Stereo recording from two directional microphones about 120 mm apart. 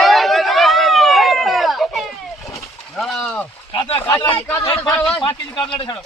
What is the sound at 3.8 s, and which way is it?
Speech, 50° left (ahead or behind).